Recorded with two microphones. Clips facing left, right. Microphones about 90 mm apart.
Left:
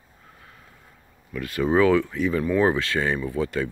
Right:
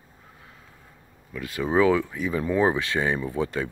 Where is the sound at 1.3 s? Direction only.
15° right (ahead or behind).